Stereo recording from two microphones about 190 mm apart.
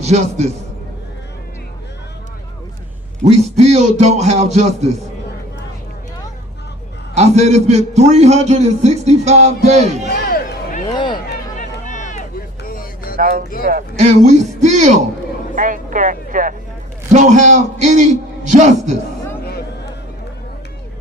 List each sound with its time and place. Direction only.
0.0 s a man's voice: 35° right (ahead or behind)
3.2 s a man's voice: 35° right (ahead or behind)
7.1 s a man's voice: 35° right (ahead or behind)
10.1 s a sound: 50° left (ahead or behind)
10.8 s a sound: 25° left (ahead or behind)
11.9 s run: 40° left (ahead or behind)
12.6 s vehicle: 50° left (ahead or behind)
13.1 s a man's voice: 55° right (ahead or behind)
19.5 s a sound: 55° left (ahead or behind)